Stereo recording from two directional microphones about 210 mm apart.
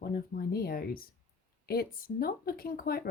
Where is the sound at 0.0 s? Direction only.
45° left (ahead or behind).